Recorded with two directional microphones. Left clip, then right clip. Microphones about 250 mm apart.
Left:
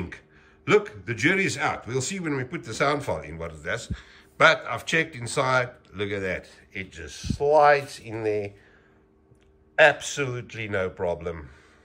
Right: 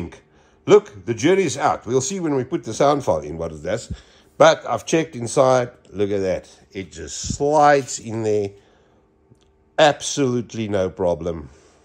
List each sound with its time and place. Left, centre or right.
0.7 s a man's voice: centre; by 8.5 s right
9.9 s a man's voice: centre